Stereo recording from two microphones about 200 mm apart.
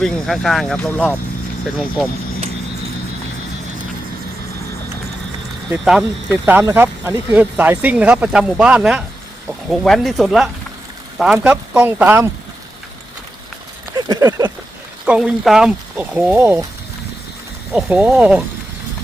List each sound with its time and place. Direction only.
0.0 s speech: centre (ahead or behind)
5.7 s speech: centre (ahead or behind)
6.4 s speech: 10° right (ahead or behind)
13.9 s a sound: 15° right (ahead or behind)
15.0 s speech: 5° right (ahead or behind)
17.7 s speech: 5° right (ahead or behind)